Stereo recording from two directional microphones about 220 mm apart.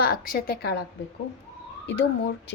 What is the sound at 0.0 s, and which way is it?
Speech, 45° left (ahead or behind).